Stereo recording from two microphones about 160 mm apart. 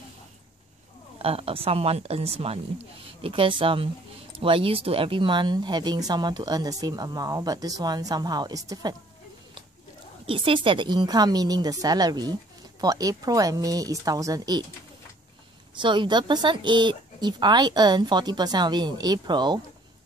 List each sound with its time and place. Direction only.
1.2 s speech: 35° right (ahead or behind)
10.2 s speech: 35° right (ahead or behind)
15.8 s speech: 30° right (ahead or behind)